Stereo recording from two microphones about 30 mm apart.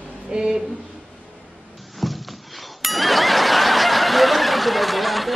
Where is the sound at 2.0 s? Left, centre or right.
Centre.